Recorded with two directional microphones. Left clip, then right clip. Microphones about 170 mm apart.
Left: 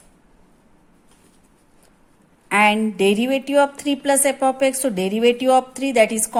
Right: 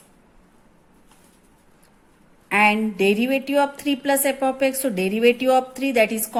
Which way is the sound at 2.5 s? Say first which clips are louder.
Left 2 dB; 20° left (ahead or behind).